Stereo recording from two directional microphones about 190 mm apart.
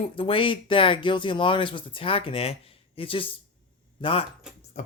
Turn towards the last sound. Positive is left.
turn(degrees=40)  # may be behind; listen again after turning